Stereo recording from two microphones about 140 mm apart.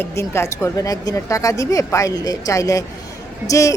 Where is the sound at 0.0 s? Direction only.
20° left (ahead or behind).